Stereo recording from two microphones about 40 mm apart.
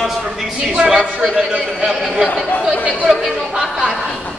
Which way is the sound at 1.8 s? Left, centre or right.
Centre.